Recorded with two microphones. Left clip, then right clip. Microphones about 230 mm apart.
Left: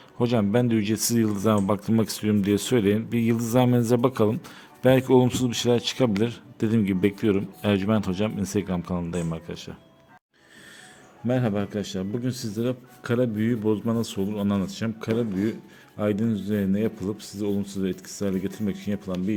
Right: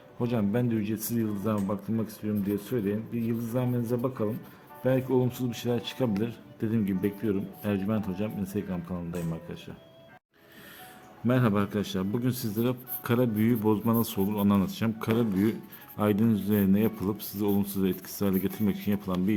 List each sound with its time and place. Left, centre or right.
0.2 s speech: left
11.3 s a man's voice: centre